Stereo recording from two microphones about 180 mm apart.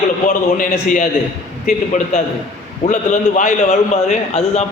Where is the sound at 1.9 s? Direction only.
45° left (ahead or behind).